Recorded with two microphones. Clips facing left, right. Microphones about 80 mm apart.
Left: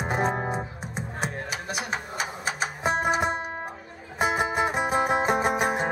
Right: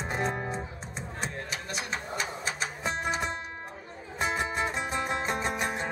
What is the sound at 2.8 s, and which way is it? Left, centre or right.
Music, left.